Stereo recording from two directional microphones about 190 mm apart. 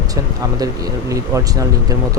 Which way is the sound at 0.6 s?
15° right (ahead or behind).